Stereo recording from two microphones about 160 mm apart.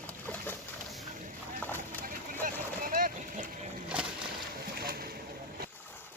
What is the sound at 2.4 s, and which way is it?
Boat, 60° right (ahead or behind).